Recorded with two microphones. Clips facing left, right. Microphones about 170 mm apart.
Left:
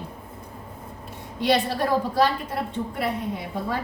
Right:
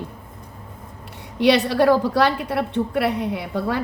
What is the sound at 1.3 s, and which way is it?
A woman's voice, 75° right (ahead or behind).